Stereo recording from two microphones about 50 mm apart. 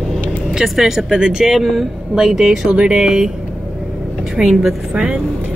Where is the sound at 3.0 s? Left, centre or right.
Centre.